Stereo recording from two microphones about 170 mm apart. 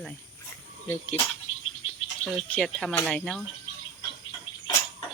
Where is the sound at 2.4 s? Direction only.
5° left (ahead or behind).